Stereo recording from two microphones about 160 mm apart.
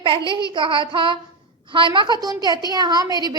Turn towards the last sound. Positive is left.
turn(degrees=-25)  # may be behind; listen again after turning